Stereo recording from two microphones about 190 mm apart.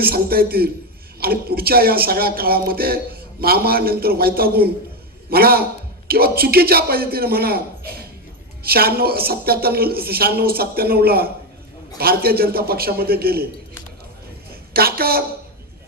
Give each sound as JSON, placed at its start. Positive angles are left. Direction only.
{"t": 0.0, "sound": "speech", "side_deg": -55}
{"t": 8.6, "sound": "speech", "side_deg": -55}
{"t": 14.7, "sound": "a woman's voice", "side_deg": -55}